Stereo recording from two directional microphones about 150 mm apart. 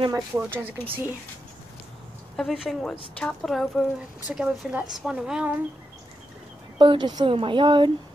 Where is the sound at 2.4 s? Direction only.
Centre (ahead or behind).